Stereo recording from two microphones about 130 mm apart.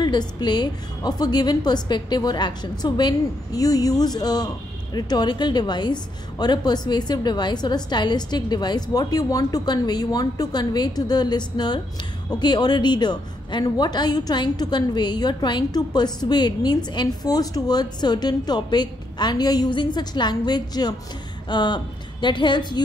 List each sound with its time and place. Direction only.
0.0 s a woman's voice: 35° left (ahead or behind)